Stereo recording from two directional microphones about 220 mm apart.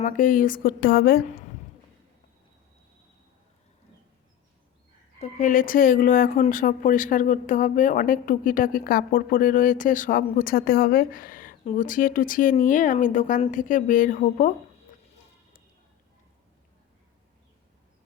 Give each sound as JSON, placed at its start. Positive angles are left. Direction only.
{"t": 0.0, "sound": "speech", "side_deg": 35}
{"t": 5.2, "sound": "speech", "side_deg": 35}